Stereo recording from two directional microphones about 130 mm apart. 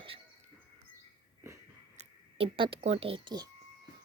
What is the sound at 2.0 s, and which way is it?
Speech, 50° right (ahead or behind).